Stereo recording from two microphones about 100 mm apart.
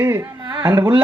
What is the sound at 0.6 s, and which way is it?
Speech, 50° right (ahead or behind).